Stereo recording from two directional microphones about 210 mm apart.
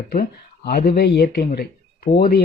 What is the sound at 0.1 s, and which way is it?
A man's voice, 45° left (ahead or behind).